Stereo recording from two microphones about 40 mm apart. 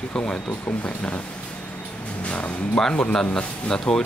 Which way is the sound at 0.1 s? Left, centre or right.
Left.